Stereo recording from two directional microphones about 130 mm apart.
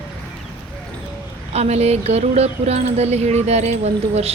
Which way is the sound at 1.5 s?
55° right (ahead or behind).